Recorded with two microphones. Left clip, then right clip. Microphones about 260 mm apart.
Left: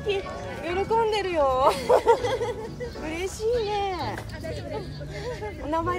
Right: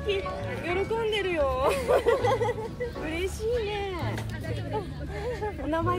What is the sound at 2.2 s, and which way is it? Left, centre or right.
Speech, centre.